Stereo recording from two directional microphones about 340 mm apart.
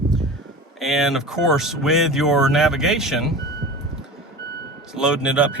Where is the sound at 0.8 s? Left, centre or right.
Centre.